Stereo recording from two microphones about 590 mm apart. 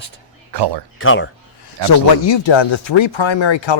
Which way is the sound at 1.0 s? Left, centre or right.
Centre.